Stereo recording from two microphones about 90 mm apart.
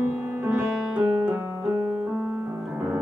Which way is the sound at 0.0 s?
25° right (ahead or behind).